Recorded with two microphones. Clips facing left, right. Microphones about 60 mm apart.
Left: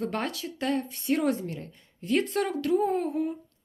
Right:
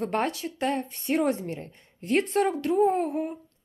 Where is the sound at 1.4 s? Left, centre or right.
Right.